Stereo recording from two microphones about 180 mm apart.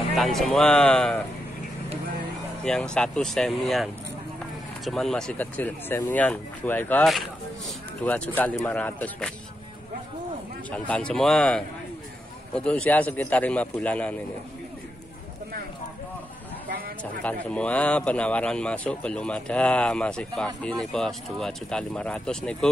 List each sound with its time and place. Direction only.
0.1 s speech: centre (ahead or behind)
2.6 s speech: 5° left (ahead or behind)
10.7 s speech: 5° left (ahead or behind)
16.6 s a sound: 55° right (ahead or behind)
17.0 s speech: 10° left (ahead or behind)